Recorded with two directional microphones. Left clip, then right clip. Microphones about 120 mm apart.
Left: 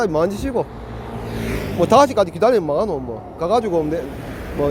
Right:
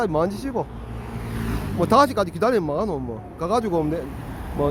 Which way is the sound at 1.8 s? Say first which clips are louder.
Left 4 dB; 15° right (ahead or behind).